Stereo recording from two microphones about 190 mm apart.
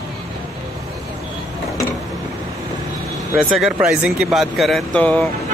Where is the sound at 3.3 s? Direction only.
Centre (ahead or behind).